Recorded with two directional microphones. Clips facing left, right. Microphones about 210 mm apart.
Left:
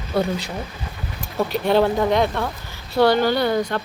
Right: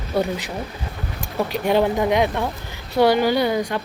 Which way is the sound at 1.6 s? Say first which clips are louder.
Left 1 dB; 15° right (ahead or behind).